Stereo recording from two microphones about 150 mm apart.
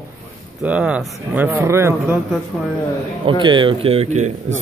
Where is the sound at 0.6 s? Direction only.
10° right (ahead or behind).